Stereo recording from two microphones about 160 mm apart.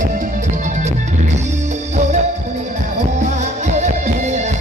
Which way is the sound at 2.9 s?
45° right (ahead or behind).